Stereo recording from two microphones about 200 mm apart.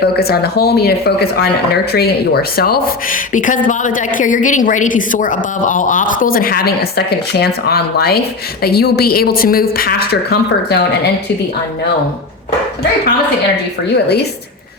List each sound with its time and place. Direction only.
0.0 s speech: 50° left (ahead or behind)
13.9 s a woman's voice: 55° left (ahead or behind)